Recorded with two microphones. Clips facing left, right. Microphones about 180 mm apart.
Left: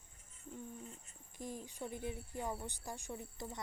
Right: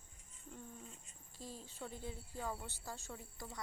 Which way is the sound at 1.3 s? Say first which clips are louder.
Left 5 dB; 15° left (ahead or behind).